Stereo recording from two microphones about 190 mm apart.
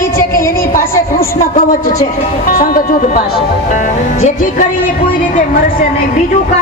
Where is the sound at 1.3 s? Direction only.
45° left (ahead or behind).